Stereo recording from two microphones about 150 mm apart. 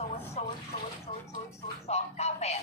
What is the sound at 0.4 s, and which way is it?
Bathtub, 45° left (ahead or behind).